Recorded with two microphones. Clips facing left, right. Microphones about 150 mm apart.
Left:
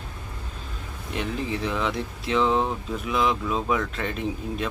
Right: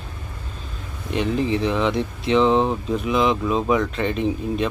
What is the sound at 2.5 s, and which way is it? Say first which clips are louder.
Speech: right 5 dB; 25° right (ahead or behind).